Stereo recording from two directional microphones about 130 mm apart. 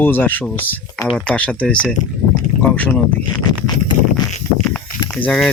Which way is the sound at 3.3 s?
35° left (ahead or behind).